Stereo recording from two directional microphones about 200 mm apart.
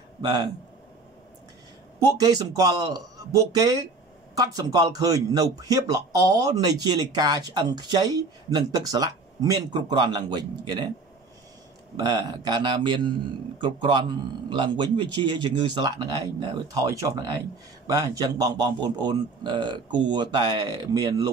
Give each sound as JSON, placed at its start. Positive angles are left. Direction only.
{"t": 0.2, "sound": "a man's voice", "side_deg": -20}
{"t": 2.1, "sound": "a man's voice", "side_deg": -20}
{"t": 12.0, "sound": "a man's voice", "side_deg": -20}